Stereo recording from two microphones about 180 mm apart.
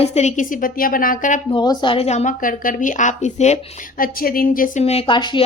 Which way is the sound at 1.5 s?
25° left (ahead or behind).